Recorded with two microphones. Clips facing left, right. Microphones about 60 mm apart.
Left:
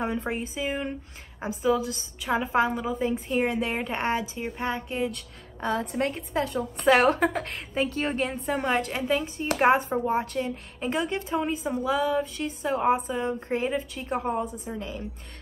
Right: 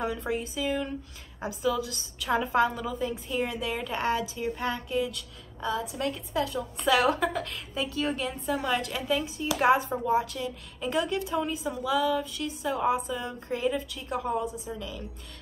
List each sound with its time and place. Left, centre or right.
0.0 s a woman's voice: left